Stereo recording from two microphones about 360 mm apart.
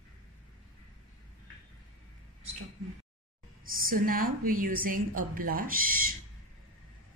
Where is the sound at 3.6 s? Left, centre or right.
Right.